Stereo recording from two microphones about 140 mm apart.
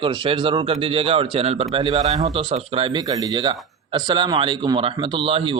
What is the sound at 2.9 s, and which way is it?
A man's voice, 25° right (ahead or behind).